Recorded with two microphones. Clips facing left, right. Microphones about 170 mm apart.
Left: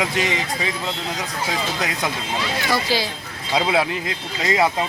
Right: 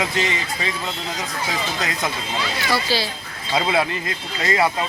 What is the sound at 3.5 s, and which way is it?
Speech, 5° left (ahead or behind).